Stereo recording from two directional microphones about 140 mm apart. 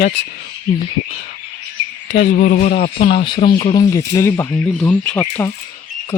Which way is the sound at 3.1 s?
40° left (ahead or behind).